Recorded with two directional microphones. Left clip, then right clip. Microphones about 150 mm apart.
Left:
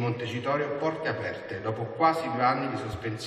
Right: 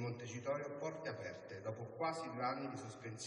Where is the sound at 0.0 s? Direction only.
30° left (ahead or behind).